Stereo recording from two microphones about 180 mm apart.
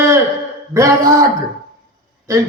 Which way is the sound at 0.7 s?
15° right (ahead or behind).